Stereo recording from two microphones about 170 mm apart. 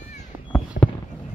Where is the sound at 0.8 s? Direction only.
60° left (ahead or behind).